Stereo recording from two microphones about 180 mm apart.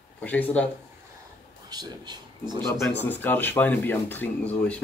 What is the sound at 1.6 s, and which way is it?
Speech, 25° right (ahead or behind).